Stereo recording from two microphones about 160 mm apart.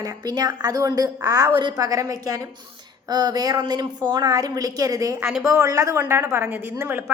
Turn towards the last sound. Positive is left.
turn(degrees=-15)  # may be behind; listen again after turning